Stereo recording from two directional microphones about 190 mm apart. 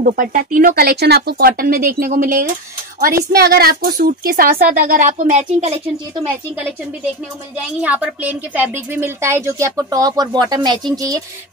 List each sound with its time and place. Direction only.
0.0 s a woman's voice: 45° right (ahead or behind)
7.8 s a woman's voice: 5° right (ahead or behind)